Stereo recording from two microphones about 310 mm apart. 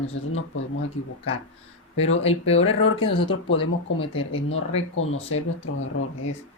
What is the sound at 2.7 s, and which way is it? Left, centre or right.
Speech, left.